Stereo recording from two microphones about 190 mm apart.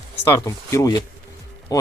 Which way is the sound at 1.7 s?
20° left (ahead or behind).